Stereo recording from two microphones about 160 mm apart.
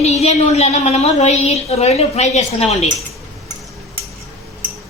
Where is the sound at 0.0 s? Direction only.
45° left (ahead or behind).